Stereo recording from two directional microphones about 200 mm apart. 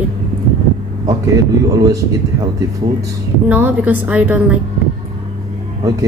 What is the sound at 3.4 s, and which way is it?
A woman's voice, 10° right (ahead or behind).